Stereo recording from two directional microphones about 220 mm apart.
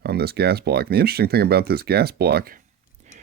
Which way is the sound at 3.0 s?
30° right (ahead or behind).